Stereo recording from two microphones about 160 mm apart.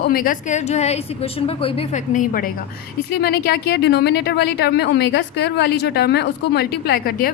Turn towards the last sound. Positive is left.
turn(degrees=65)  # may be behind; listen again after turning